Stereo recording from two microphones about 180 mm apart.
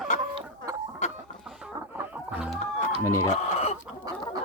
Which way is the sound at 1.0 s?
40° left (ahead or behind).